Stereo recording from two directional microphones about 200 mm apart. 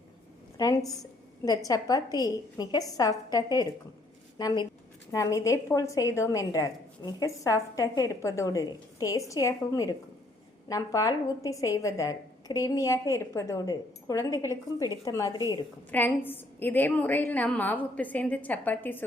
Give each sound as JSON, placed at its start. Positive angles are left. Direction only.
{"t": 0.5, "sound": "a woman's voice", "side_deg": 15}
{"t": 15.9, "sound": "a woman's voice", "side_deg": 10}